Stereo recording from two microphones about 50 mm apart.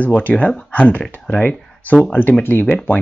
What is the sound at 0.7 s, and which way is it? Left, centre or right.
Speech, left.